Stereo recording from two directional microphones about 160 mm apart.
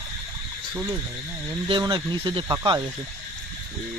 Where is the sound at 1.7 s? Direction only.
30° right (ahead or behind).